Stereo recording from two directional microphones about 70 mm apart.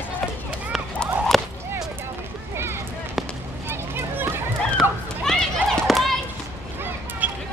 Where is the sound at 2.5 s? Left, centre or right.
Right.